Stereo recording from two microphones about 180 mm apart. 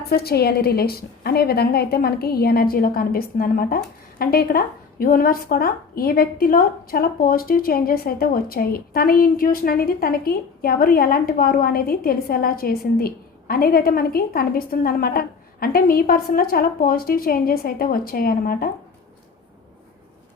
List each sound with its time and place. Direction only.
0.1 s speech: 60° left (ahead or behind)